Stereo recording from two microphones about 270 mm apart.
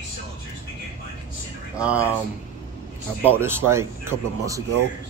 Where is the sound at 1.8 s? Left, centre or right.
Centre.